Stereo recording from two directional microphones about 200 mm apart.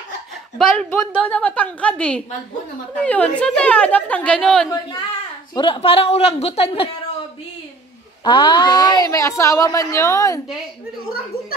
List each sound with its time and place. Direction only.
0.6 s a woman's voice: 5° left (ahead or behind)
5.5 s a woman's voice: 25° left (ahead or behind)
8.2 s speech: 20° left (ahead or behind)